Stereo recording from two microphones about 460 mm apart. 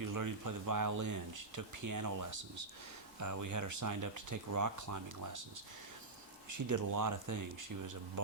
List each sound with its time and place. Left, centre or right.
0.0 s speech: right
6.5 s speech: right